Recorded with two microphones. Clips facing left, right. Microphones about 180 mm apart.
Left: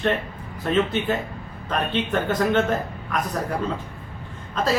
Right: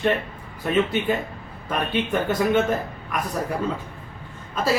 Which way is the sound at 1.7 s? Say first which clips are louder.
Even; 10° right (ahead or behind).